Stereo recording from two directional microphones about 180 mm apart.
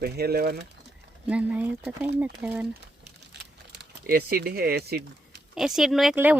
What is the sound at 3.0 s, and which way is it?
Crumpling, 70° right (ahead or behind).